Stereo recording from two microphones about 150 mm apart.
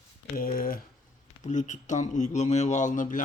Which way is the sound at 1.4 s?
55° left (ahead or behind).